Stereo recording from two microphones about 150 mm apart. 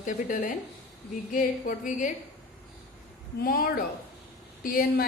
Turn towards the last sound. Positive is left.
turn(degrees=80)